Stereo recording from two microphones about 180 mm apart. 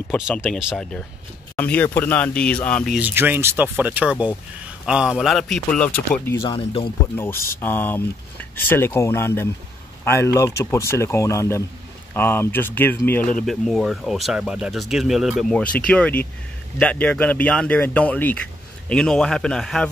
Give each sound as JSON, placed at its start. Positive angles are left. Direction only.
{"t": 0.1, "sound": "speech", "side_deg": 0}
{"t": 1.6, "sound": "speech", "side_deg": 10}
{"t": 3.0, "sound": "speech", "side_deg": -10}
{"t": 6.5, "sound": "speech", "side_deg": 30}
{"t": 7.2, "sound": "speech", "side_deg": 10}